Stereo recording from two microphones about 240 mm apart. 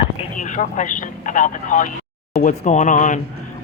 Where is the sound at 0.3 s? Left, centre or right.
Left.